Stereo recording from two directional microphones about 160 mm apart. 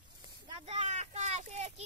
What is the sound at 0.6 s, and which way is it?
Speech, 45° right (ahead or behind).